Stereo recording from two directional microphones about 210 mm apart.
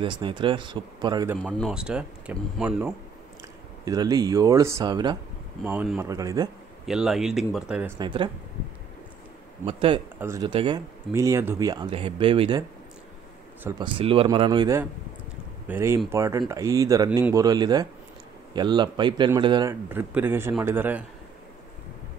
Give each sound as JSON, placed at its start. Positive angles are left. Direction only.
{"t": 0.0, "sound": "speech", "side_deg": -25}
{"t": 1.4, "sound": "speech", "side_deg": 0}
{"t": 3.8, "sound": "speech", "side_deg": -15}
{"t": 5.6, "sound": "speech", "side_deg": -10}
{"t": 6.9, "sound": "speech", "side_deg": 0}
{"t": 8.0, "sound": "speech", "side_deg": -25}
{"t": 9.7, "sound": "speech", "side_deg": -25}
{"t": 10.1, "sound": "speech", "side_deg": -15}
{"t": 13.7, "sound": "speech", "side_deg": -20}
{"t": 15.7, "sound": "speech", "side_deg": -10}
{"t": 19.7, "sound": "speech", "side_deg": -10}